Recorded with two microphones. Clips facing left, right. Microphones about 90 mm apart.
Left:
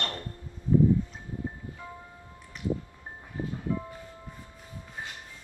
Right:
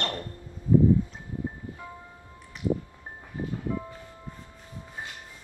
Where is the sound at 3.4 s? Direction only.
20° right (ahead or behind).